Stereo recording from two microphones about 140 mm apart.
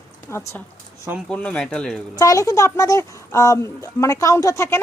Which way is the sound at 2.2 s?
25° left (ahead or behind).